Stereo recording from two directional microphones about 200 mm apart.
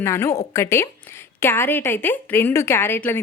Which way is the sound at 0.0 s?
15° left (ahead or behind).